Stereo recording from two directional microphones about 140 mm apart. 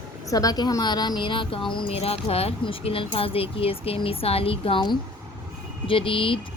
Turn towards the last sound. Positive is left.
turn(degrees=40)  # may be behind; listen again after turning